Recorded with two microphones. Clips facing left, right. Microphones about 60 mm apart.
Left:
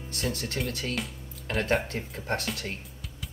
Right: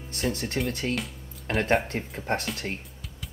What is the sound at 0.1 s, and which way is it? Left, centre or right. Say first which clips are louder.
Speech: right 3 dB; right.